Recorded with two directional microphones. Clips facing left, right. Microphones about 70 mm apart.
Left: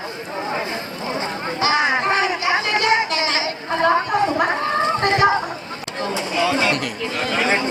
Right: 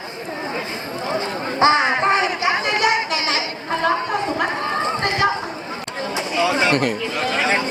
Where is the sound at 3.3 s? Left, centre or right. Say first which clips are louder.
Left 1 dB; centre.